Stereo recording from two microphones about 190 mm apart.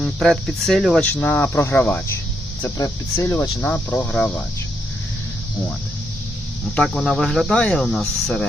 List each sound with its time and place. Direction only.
0.0 s speech: centre (ahead or behind)
6.7 s speech: centre (ahead or behind)